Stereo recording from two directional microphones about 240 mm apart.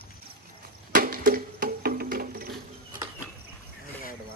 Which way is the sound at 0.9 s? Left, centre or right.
Right.